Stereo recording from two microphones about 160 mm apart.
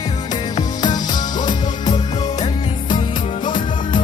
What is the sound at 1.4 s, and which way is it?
Music, 25° left (ahead or behind).